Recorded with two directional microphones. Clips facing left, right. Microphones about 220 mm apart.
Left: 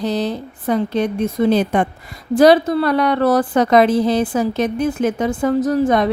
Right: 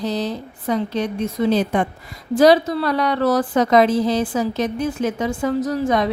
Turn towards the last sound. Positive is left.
turn(degrees=50)  # may be behind; listen again after turning